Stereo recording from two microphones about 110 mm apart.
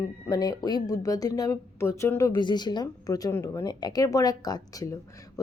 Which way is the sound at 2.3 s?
45° left (ahead or behind).